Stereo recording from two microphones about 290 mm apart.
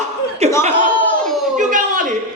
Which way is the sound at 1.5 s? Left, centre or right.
Right.